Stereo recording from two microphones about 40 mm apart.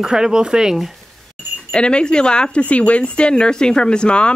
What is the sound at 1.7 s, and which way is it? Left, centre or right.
Speech, left.